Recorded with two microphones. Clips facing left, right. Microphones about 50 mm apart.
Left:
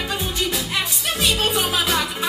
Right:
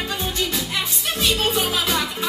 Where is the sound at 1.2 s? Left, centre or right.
Centre.